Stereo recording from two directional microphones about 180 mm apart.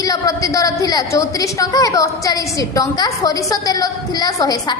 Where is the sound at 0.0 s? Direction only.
20° left (ahead or behind).